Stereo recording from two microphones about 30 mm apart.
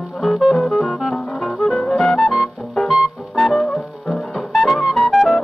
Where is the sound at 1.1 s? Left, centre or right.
Left.